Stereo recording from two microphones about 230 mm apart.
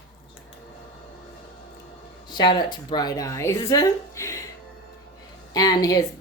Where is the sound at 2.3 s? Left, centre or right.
Centre.